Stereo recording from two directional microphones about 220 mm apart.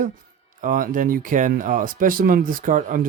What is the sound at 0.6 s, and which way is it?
Speech, 35° right (ahead or behind).